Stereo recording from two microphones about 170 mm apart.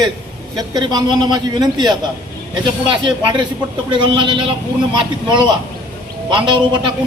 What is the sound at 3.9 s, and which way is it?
Speech, 30° right (ahead or behind).